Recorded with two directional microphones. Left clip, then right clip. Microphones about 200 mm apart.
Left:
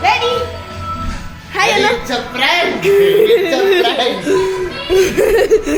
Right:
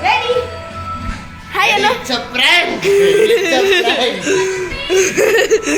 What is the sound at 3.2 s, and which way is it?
Music, centre (ahead or behind).